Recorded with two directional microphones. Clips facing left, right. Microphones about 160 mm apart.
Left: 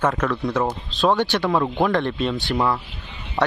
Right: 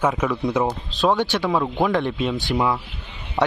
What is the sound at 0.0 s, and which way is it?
Speech, 5° right (ahead or behind).